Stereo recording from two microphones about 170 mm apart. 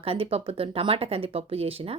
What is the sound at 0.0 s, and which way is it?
Speech, 35° right (ahead or behind).